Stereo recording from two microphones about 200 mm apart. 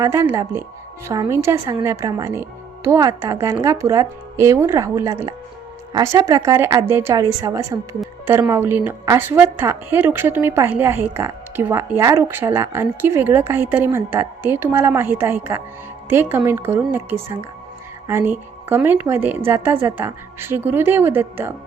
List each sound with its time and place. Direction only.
0.0 s a woman's voice: 15° right (ahead or behind)